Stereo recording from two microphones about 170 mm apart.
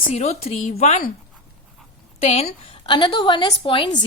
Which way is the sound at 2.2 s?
35° left (ahead or behind).